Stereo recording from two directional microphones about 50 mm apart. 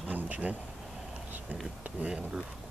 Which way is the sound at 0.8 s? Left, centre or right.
Centre.